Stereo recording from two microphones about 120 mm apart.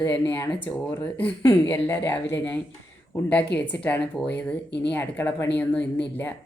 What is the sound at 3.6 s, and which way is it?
Speech, 10° left (ahead or behind).